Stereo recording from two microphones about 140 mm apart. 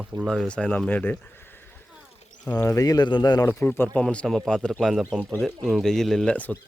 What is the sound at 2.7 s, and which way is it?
A man's voice, 25° left (ahead or behind).